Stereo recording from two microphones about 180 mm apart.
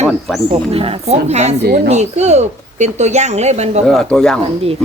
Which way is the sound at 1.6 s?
60° right (ahead or behind).